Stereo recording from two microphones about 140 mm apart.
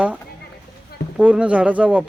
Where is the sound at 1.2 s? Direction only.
10° right (ahead or behind).